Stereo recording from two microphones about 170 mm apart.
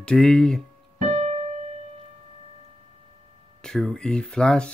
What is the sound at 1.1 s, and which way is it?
Keyboard, 40° right (ahead or behind).